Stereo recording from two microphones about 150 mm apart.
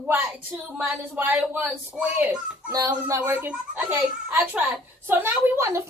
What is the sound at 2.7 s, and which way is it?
Speech, 25° right (ahead or behind).